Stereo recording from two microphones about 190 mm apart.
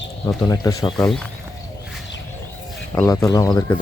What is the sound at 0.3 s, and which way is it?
Speech, 15° left (ahead or behind).